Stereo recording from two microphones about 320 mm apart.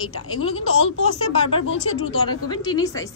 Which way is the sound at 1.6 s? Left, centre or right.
Left.